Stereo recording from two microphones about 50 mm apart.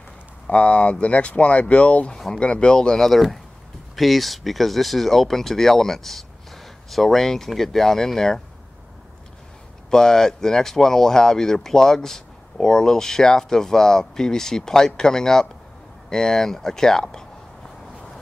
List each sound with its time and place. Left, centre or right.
0.5 s speech: left; by 8.4 s centre
9.8 s speech: centre